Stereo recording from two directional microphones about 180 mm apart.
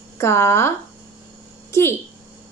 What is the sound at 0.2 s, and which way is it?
A child's voice, 15° left (ahead or behind).